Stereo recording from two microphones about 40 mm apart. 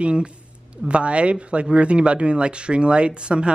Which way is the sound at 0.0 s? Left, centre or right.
Right.